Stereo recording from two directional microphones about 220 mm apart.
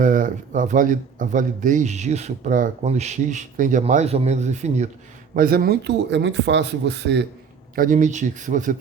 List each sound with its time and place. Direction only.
0.0 s speech: 35° right (ahead or behind)
7.8 s speech: 35° right (ahead or behind)